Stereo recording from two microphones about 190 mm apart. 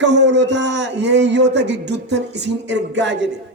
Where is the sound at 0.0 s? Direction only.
65° right (ahead or behind).